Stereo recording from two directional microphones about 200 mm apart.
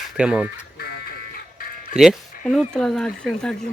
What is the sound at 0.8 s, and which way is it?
Music, 50° left (ahead or behind).